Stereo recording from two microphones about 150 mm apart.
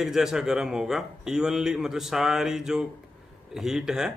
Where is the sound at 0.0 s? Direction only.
5° right (ahead or behind).